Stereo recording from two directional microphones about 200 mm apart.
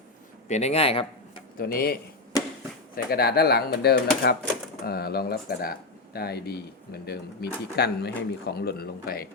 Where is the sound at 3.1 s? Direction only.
50° left (ahead or behind).